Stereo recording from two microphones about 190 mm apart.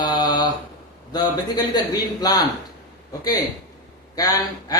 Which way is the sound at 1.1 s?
20° left (ahead or behind).